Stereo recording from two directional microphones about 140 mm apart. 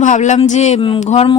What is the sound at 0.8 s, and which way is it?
Speech, 35° left (ahead or behind).